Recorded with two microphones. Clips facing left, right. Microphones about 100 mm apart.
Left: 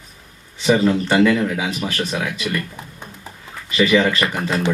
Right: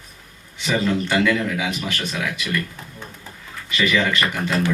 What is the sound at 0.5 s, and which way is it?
Speech, 35° left (ahead or behind).